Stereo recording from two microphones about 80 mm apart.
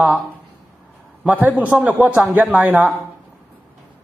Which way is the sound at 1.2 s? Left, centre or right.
Centre.